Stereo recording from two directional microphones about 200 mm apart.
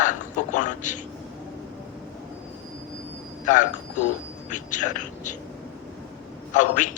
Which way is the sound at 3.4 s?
40° left (ahead or behind).